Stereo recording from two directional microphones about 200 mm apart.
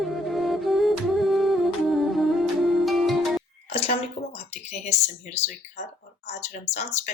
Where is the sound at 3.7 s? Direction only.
30° left (ahead or behind).